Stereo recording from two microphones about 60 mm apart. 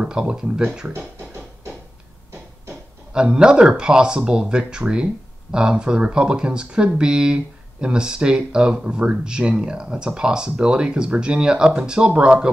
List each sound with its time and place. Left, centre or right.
0.0 s speech: centre
3.1 s speech: centre